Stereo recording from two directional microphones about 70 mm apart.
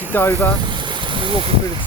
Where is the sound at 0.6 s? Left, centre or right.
Right.